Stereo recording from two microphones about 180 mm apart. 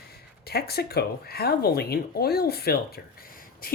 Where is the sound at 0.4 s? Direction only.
60° left (ahead or behind).